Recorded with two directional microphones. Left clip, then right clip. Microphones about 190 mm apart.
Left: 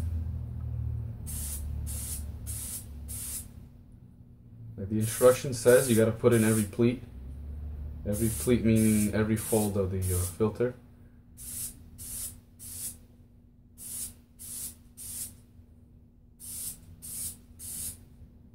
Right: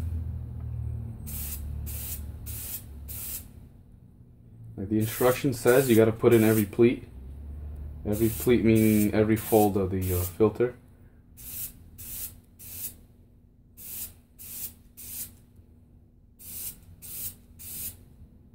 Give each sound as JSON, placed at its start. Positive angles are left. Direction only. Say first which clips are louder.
{"t": 4.9, "sound": "speech", "louder": "left 2 dB", "side_deg": -55}
{"t": 8.0, "sound": "speech", "louder": "right 5 dB", "side_deg": -55}